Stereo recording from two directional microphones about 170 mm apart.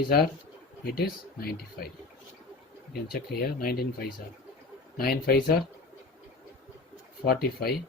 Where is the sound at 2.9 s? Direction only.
65° left (ahead or behind).